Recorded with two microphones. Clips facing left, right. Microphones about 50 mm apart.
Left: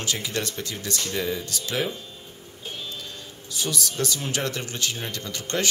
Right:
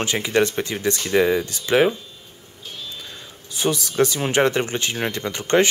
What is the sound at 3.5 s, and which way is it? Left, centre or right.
Speech, right.